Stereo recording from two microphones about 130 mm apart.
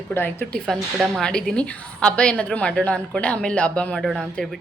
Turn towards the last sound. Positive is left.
turn(degrees=5)  # may be behind; listen again after turning